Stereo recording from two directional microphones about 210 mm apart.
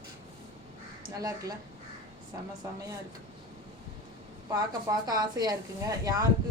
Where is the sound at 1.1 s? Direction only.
15° right (ahead or behind).